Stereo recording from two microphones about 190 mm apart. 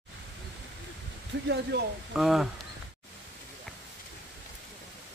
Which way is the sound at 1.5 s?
60° right (ahead or behind).